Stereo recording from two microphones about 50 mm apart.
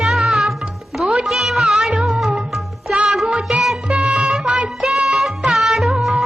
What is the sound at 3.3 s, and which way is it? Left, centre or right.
Music, centre.